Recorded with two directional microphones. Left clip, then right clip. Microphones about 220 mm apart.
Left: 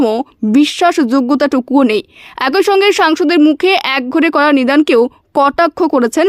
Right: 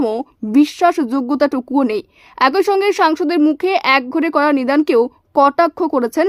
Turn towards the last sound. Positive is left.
turn(degrees=25)  # may be behind; listen again after turning